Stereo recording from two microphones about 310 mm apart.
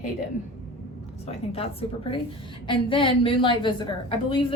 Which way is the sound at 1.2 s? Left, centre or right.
Centre.